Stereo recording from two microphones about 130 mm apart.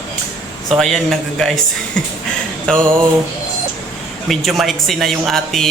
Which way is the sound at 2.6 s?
5° left (ahead or behind).